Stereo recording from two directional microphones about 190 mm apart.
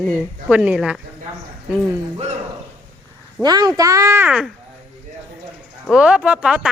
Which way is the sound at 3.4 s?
20° right (ahead or behind).